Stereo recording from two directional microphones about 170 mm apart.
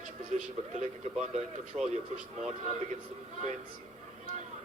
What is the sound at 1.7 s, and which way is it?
Speech, 15° right (ahead or behind).